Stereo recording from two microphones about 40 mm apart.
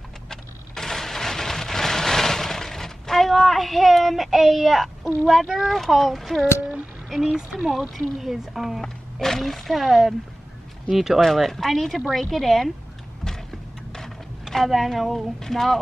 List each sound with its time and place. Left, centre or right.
0.3 s a sound: centre
5.6 s speech: centre
7.2 s speech: centre
8.8 s speech: centre
13.2 s a sound: centre
14.4 s speech: centre